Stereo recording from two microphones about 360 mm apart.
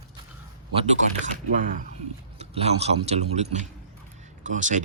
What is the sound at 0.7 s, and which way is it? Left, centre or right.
Speech, centre.